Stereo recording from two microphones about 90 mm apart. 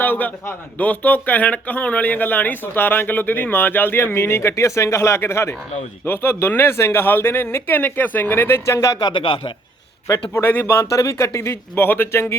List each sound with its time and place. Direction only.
0.0 s speech: 20° left (ahead or behind)
9.0 s a man's voice: 50° left (ahead or behind)
9.2 s a man's voice: 70° left (ahead or behind)
10.3 s speech: 25° left (ahead or behind)
10.9 s speech: 35° left (ahead or behind)